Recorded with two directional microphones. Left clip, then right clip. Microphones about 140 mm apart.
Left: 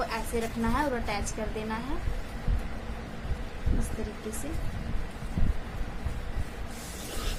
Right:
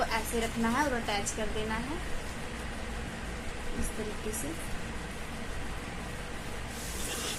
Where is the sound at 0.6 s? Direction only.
40° left (ahead or behind).